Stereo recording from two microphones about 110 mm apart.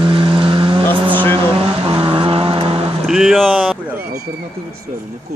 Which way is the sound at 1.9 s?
50° right (ahead or behind).